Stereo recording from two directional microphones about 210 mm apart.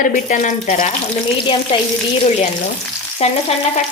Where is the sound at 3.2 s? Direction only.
30° left (ahead or behind).